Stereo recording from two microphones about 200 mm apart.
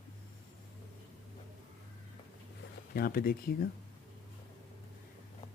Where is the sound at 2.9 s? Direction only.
45° left (ahead or behind).